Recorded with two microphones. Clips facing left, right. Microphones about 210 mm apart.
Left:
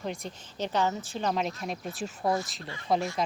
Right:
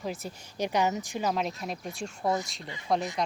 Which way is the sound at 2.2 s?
20° right (ahead or behind).